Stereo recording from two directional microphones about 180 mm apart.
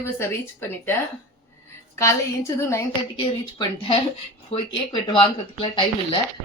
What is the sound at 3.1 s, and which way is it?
Speech, 30° left (ahead or behind).